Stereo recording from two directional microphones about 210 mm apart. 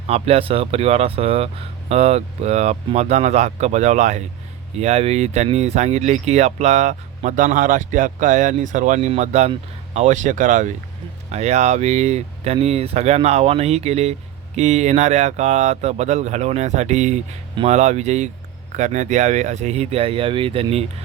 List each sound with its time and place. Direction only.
0.1 s speech: 30° right (ahead or behind)